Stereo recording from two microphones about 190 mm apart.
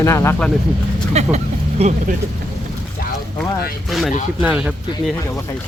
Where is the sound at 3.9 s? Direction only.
Centre (ahead or behind).